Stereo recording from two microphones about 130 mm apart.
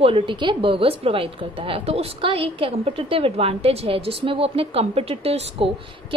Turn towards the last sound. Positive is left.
turn(degrees=-50)  # may be behind; listen again after turning